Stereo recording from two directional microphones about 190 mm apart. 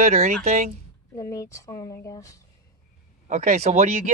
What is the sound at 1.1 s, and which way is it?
Speech, 15° left (ahead or behind).